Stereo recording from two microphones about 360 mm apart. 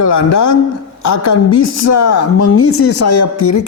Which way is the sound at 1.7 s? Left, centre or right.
Left.